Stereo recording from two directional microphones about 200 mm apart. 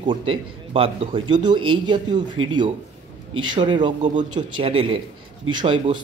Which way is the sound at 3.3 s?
25° right (ahead or behind).